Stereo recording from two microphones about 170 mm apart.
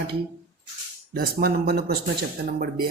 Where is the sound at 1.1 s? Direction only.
65° right (ahead or behind).